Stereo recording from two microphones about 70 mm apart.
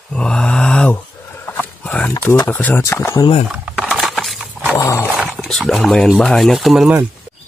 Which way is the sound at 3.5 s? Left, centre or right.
Centre.